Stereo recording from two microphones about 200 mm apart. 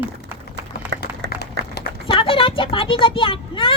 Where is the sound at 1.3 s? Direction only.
55° left (ahead or behind).